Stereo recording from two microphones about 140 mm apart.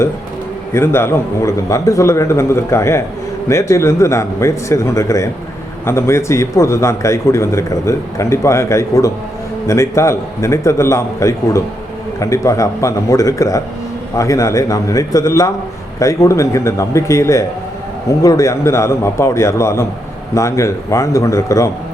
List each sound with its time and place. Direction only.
0.7 s a man's voice: 20° left (ahead or behind)